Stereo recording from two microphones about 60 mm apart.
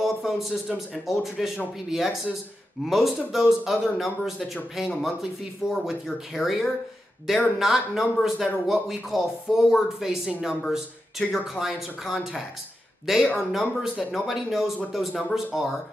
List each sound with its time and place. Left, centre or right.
0.0 s speech: centre